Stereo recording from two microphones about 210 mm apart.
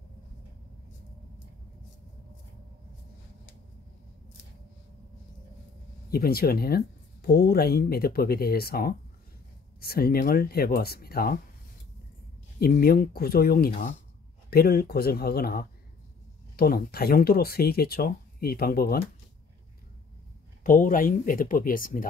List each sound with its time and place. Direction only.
6.0 s speech: 45° left (ahead or behind)
12.5 s speech: 45° left (ahead or behind)
20.6 s speech: 40° left (ahead or behind)